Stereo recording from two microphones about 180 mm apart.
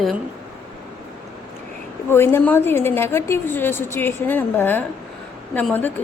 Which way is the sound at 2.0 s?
15° left (ahead or behind).